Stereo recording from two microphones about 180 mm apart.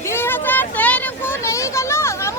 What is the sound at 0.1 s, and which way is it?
Vehicle, 10° left (ahead or behind).